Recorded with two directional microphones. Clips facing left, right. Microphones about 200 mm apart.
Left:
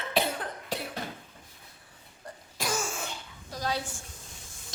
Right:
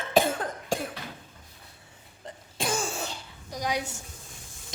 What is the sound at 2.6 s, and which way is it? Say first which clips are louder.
Cough: right 3 dB; 25° right (ahead or behind).